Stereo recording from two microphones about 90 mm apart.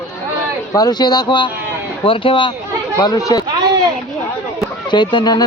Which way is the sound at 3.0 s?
40° left (ahead or behind).